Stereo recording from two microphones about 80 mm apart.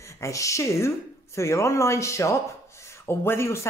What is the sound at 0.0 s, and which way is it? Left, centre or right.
A woman's voice, left.